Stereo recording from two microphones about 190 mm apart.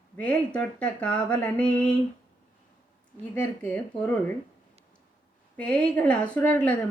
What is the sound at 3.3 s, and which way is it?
Speech, 5° left (ahead or behind).